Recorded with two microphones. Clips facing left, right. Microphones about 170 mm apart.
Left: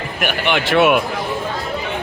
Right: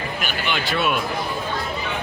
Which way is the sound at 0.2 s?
65° left (ahead or behind).